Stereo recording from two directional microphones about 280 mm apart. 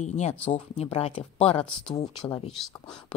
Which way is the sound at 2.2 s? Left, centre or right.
Centre.